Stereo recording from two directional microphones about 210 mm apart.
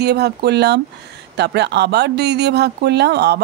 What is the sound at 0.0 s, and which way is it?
A man's voice, 50° right (ahead or behind).